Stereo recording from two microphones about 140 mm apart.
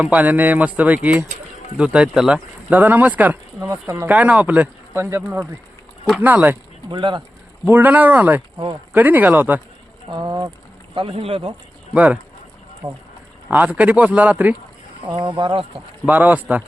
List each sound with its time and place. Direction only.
0.0 s speech: 10° right (ahead or behind)
6.8 s speech: 30° right (ahead or behind)
7.6 s speech: 10° right (ahead or behind)
10.1 s speech: 30° right (ahead or behind)
10.9 s speech: 40° right (ahead or behind)
11.9 s speech: 10° right (ahead or behind)
12.8 s speech: 25° right (ahead or behind)
13.5 s speech: 10° right (ahead or behind)
15.1 s speech: 35° right (ahead or behind)
16.0 s speech: 10° right (ahead or behind)